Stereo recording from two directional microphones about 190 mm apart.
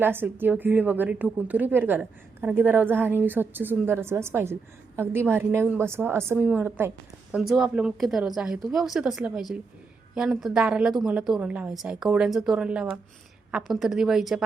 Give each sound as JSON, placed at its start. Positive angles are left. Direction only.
{"t": 0.0, "sound": "a woman's voice", "side_deg": -10}